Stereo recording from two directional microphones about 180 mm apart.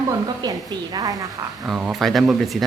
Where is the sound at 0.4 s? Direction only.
20° right (ahead or behind).